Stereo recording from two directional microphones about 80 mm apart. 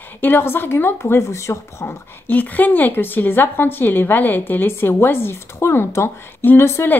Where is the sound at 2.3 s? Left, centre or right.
Left.